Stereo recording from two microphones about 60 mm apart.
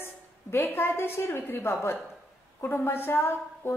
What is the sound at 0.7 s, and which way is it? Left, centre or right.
A woman's voice, left.